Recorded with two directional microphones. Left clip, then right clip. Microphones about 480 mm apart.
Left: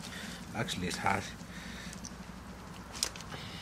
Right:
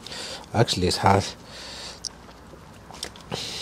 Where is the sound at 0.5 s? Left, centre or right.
Right.